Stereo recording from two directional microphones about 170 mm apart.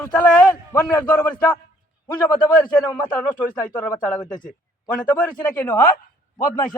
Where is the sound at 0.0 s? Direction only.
10° left (ahead or behind).